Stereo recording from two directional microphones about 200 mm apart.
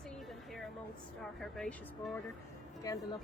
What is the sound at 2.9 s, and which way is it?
Speech, 15° left (ahead or behind).